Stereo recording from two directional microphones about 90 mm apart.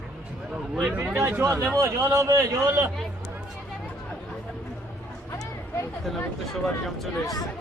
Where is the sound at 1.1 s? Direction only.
30° right (ahead or behind).